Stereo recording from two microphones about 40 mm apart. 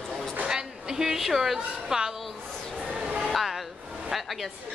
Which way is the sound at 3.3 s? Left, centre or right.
Centre.